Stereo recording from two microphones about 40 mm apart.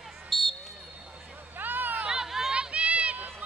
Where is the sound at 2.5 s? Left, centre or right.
Right.